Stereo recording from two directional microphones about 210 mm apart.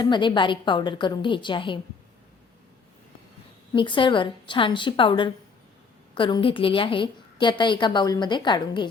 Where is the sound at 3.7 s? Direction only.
25° left (ahead or behind).